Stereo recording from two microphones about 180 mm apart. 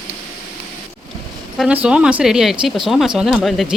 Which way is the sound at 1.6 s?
5° right (ahead or behind).